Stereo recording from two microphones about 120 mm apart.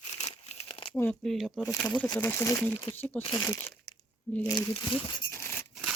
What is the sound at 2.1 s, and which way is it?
Speech, 20° left (ahead or behind).